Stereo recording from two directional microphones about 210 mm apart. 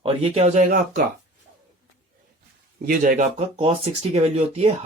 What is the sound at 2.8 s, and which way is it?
Speech, 40° right (ahead or behind).